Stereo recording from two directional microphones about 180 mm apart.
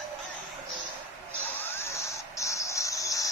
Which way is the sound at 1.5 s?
15° left (ahead or behind).